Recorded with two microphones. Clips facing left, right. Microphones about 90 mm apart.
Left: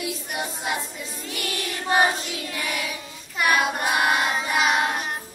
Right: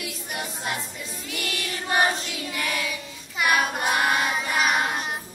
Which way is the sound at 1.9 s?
20° left (ahead or behind).